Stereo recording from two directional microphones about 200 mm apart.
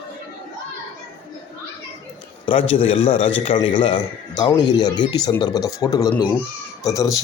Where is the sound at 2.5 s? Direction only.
25° left (ahead or behind).